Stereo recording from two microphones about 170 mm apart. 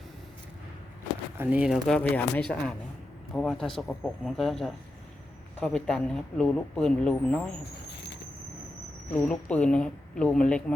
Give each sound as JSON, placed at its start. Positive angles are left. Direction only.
{"t": 1.4, "sound": "speech", "side_deg": -10}
{"t": 7.9, "sound": "a sound", "side_deg": 75}
{"t": 9.1, "sound": "speech", "side_deg": 5}